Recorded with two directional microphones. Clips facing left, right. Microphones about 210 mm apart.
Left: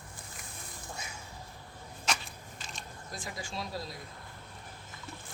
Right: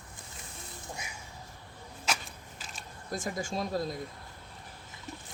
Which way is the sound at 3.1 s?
45° right (ahead or behind).